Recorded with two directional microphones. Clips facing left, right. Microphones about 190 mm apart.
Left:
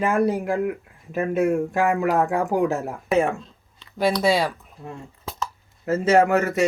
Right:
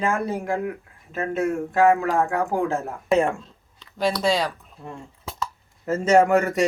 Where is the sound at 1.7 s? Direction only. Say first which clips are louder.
Right 2 dB; 15° left (ahead or behind).